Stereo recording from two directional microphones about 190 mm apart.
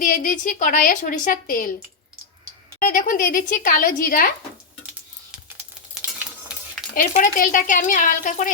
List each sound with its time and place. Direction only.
0.0 s a woman's voice: 45° left (ahead or behind)
2.7 s a woman's voice: 45° left (ahead or behind)
5.5 s a sound: 10° right (ahead or behind)
7.1 s a woman's voice: 45° left (ahead or behind)